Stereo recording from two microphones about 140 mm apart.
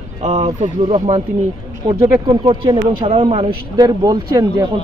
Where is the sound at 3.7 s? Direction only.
30° right (ahead or behind).